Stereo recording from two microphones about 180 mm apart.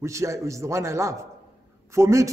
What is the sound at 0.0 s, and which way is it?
A man's voice, 15° right (ahead or behind).